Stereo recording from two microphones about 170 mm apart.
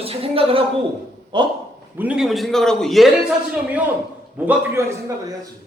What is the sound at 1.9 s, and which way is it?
A man's voice, 5° right (ahead or behind).